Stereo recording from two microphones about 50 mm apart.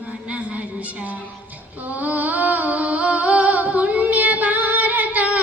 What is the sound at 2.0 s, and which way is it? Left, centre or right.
Humming, right.